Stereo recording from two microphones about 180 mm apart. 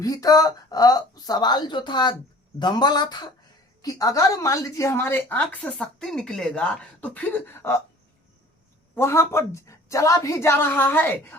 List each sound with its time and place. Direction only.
0.0 s a woman's voice: 20° left (ahead or behind)
9.0 s a woman's voice: 15° left (ahead or behind)